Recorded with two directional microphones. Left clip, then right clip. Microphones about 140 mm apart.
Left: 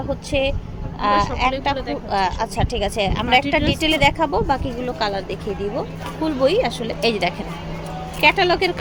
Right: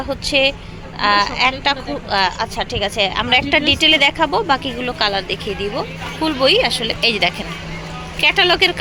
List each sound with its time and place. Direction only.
0.1 s speech: centre (ahead or behind)
2.6 s a woman's voice: 15° left (ahead or behind)